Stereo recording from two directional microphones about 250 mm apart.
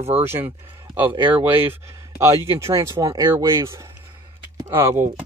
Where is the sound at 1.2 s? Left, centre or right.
Centre.